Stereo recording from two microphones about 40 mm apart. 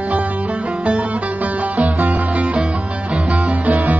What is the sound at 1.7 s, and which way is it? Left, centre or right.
Music, right.